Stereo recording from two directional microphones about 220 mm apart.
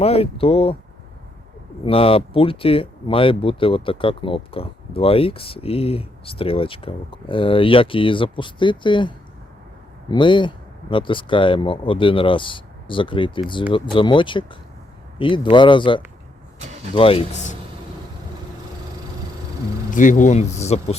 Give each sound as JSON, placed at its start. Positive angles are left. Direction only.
{"t": 0.0, "sound": "speech", "side_deg": 25}
{"t": 1.8, "sound": "speech", "side_deg": 25}
{"t": 19.9, "sound": "speech", "side_deg": 35}